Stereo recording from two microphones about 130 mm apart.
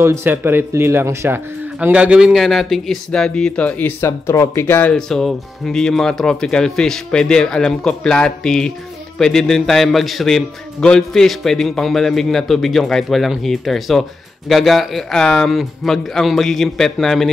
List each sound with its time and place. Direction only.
0.0 s a man's voice: 20° right (ahead or behind); by 4.9 s 15° left (ahead or behind)
4.9 s a man's voice: 5° left (ahead or behind)